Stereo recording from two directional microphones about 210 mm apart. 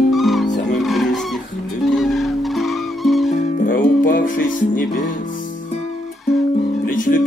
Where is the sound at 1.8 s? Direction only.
Centre (ahead or behind).